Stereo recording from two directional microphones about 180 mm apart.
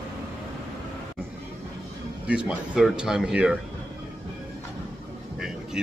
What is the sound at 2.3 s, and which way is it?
Speech, 5° right (ahead or behind).